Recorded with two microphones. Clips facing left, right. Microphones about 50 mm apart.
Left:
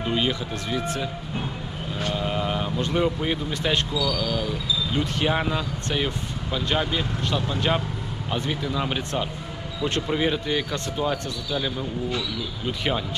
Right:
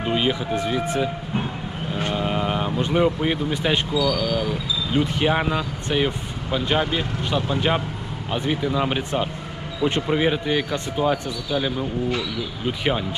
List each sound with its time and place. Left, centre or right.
0.0 s speech: centre